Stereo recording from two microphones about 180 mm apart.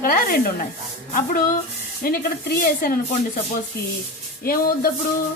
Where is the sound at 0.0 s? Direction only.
55° left (ahead or behind).